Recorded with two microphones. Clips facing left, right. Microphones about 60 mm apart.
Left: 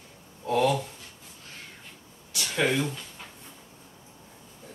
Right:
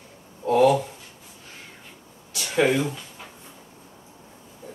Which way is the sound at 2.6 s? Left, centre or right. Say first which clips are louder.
Right 5 dB; centre.